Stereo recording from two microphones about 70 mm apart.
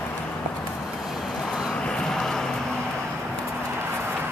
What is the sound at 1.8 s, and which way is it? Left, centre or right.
Vehicle, centre.